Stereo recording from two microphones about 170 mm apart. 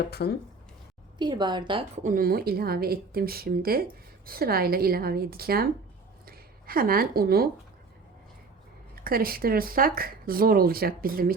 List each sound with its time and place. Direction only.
0.1 s speech: 70° left (ahead or behind)
1.2 s a woman's voice: 25° right (ahead or behind)
2.0 s speech: 60° right (ahead or behind)
9.0 s speech: 60° right (ahead or behind)